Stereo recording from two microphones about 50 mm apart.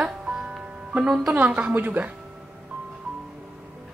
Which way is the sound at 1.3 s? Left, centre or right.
Right.